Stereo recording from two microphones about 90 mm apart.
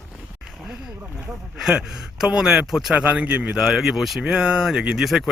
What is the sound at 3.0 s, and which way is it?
Speech, 15° right (ahead or behind).